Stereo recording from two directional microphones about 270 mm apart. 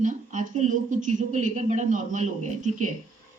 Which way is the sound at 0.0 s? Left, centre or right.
Right.